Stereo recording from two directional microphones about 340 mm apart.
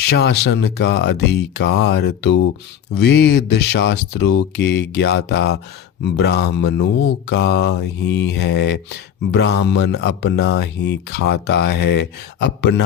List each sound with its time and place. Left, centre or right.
0.0 s speech: left